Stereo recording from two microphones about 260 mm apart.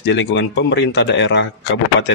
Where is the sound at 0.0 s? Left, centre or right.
Left.